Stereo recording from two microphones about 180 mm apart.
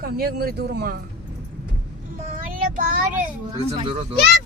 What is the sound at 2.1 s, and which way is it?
Child singing, 50° right (ahead or behind).